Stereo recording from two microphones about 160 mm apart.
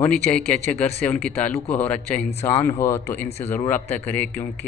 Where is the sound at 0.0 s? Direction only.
10° left (ahead or behind).